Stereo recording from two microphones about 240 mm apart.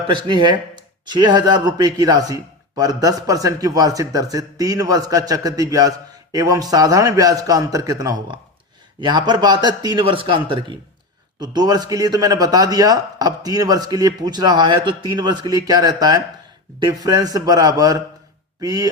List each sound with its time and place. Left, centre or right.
0.1 s a man's voice: centre